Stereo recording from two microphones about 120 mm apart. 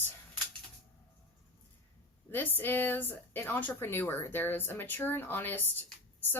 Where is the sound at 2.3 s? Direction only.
15° left (ahead or behind).